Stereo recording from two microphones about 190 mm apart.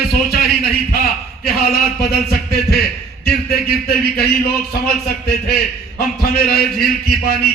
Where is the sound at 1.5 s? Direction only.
50° left (ahead or behind).